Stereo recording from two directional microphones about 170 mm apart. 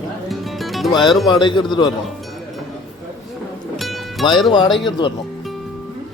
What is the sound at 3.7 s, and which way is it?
Music, centre (ahead or behind).